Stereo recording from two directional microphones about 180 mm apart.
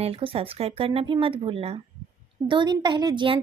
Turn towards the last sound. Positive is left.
turn(degrees=-25)  # may be behind; listen again after turning